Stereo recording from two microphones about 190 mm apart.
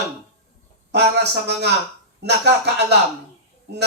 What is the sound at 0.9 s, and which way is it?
A man's voice, 60° right (ahead or behind).